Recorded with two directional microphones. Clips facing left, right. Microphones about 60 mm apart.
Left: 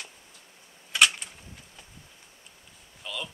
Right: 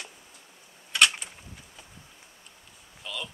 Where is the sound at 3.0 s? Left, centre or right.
Centre.